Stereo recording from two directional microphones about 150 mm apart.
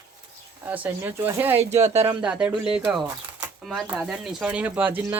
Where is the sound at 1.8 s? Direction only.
45° right (ahead or behind).